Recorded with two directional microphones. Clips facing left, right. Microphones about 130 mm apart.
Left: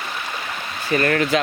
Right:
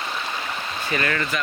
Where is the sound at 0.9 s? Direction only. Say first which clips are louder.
Left 6 dB; 40° left (ahead or behind).